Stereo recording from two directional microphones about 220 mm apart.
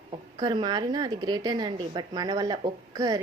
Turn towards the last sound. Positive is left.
turn(degrees=-15)  # may be behind; listen again after turning